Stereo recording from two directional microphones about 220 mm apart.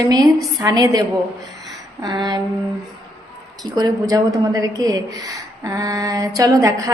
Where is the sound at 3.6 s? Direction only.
15° right (ahead or behind).